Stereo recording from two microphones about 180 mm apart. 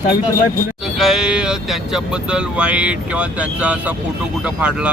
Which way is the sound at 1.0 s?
5° right (ahead or behind).